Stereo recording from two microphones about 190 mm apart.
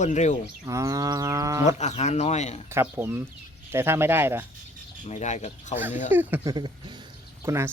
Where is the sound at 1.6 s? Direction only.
35° left (ahead or behind).